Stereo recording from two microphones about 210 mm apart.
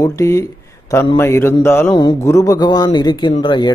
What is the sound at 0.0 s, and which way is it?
Speech, 15° left (ahead or behind).